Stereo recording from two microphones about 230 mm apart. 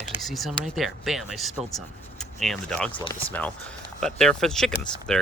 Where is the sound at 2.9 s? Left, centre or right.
Left.